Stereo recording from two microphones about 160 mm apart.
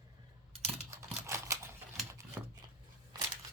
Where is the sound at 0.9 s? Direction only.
20° right (ahead or behind).